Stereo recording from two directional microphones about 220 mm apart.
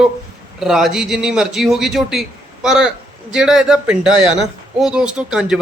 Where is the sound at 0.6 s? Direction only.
Centre (ahead or behind).